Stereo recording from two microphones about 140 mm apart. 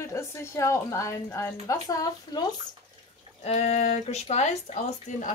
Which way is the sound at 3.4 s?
50° left (ahead or behind).